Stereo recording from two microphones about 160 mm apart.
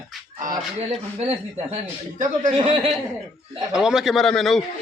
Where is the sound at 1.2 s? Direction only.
40° right (ahead or behind).